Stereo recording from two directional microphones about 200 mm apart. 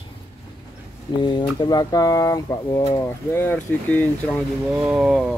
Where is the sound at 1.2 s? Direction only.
25° left (ahead or behind); by 4.4 s 5° left (ahead or behind).